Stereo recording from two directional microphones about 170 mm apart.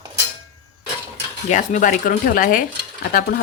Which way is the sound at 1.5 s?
45° left (ahead or behind).